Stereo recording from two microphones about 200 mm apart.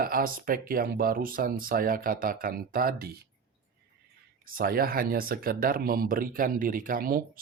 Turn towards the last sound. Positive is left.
turn(degrees=-45)  # may be behind; listen again after turning